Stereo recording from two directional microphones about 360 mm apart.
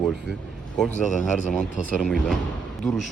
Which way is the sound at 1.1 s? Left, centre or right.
Left.